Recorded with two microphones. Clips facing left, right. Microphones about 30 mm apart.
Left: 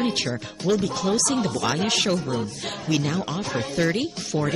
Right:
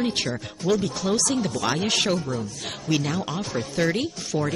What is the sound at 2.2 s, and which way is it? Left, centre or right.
Speech, left.